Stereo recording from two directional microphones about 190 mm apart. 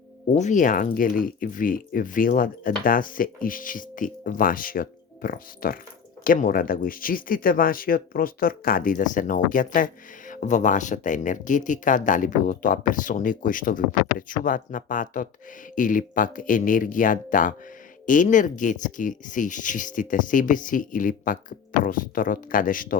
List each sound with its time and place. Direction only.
0.3 s speech: 40° left (ahead or behind)